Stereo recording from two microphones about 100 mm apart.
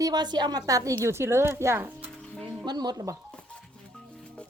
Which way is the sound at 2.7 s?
40° right (ahead or behind).